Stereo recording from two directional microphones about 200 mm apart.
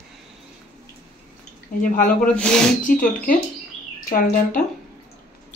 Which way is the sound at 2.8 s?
45° left (ahead or behind).